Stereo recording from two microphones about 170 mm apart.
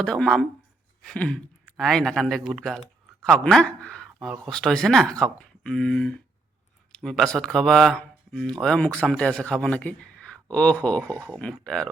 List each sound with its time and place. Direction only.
0.0 s a man's voice: 5° left (ahead or behind)
1.0 s a sound: 5° left (ahead or behind)
1.7 s a man's voice: centre (ahead or behind)
11.0 s speech: 15° right (ahead or behind)
11.3 s a man's voice: 5° left (ahead or behind)